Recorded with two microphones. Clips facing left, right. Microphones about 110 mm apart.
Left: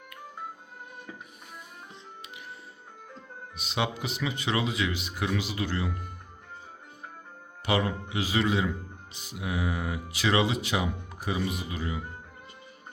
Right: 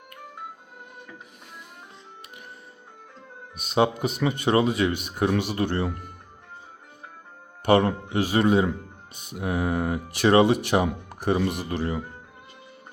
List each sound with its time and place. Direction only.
3.6 s speech: 50° right (ahead or behind)
7.6 s speech: 55° right (ahead or behind)